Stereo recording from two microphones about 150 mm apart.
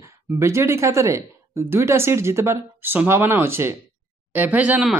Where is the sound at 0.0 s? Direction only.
20° right (ahead or behind).